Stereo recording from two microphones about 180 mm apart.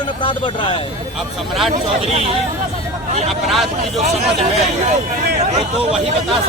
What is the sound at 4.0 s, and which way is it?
Speech, 40° right (ahead or behind).